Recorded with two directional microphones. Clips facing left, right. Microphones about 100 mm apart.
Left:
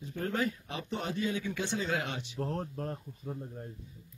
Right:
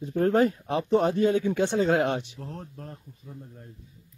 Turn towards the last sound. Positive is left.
turn(degrees=40)  # may be behind; listen again after turning